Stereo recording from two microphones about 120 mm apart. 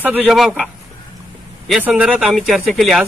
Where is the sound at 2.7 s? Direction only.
5° left (ahead or behind).